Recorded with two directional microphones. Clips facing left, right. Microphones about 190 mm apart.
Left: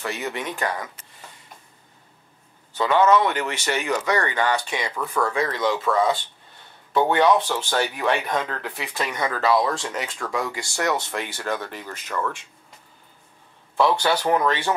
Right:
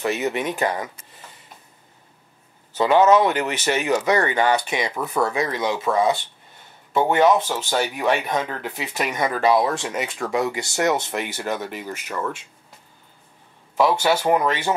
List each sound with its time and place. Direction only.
0.0 s speech: 20° right (ahead or behind)
2.8 s speech: 15° right (ahead or behind)
13.7 s speech: 10° right (ahead or behind)